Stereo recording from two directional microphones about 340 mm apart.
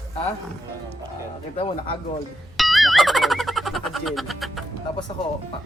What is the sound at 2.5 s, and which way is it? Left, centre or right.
Boing, centre.